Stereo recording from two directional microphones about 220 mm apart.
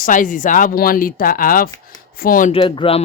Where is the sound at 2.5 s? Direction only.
25° left (ahead or behind).